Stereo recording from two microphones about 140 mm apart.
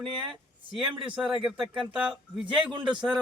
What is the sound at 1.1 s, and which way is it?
Speech, 5° right (ahead or behind).